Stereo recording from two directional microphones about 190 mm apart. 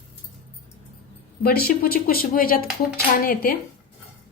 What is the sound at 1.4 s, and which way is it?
Speech, 55° left (ahead or behind).